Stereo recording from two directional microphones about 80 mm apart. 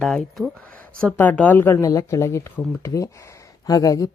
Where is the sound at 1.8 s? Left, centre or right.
Left.